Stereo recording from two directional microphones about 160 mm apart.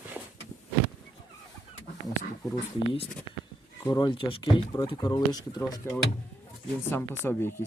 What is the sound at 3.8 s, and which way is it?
Speech, 25° left (ahead or behind).